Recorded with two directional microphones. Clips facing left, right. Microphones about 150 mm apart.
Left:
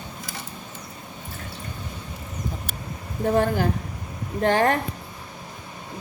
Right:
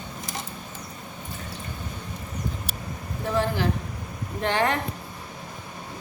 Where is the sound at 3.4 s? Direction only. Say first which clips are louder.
Left 1 dB; 50° left (ahead or behind).